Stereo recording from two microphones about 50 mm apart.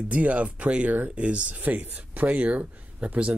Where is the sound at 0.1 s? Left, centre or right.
Right.